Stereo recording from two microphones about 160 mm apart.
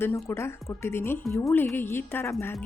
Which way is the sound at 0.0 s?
15° left (ahead or behind).